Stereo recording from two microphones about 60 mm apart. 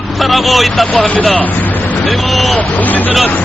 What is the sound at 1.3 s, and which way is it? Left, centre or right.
Vehicle, left.